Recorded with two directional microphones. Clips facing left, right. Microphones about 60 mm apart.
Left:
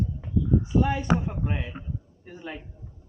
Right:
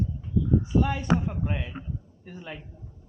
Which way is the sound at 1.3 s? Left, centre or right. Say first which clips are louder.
Even; centre.